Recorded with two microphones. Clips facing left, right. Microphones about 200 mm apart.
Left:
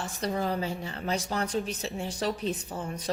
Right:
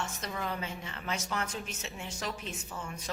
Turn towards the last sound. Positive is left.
turn(degrees=35)  # may be behind; listen again after turning